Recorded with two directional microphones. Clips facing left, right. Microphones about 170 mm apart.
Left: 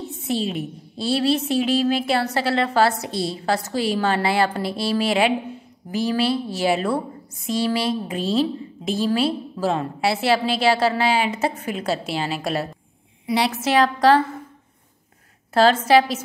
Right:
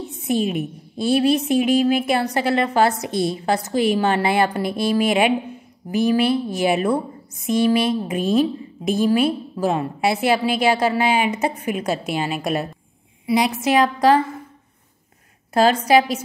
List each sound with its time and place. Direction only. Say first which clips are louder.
0.3 s a woman's voice: right 4 dB; 15° right (ahead or behind)
15.5 s a woman's voice: even; 15° right (ahead or behind)